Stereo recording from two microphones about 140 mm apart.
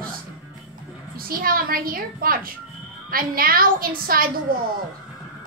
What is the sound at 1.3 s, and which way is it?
A woman's voice, 90° right.